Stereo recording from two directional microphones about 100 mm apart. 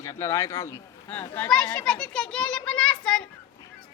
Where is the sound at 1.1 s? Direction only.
20° left (ahead or behind).